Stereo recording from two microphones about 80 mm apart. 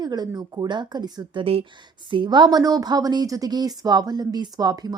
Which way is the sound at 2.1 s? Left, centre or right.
Right.